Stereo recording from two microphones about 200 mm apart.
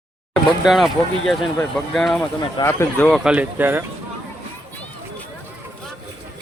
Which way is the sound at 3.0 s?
Centre (ahead or behind).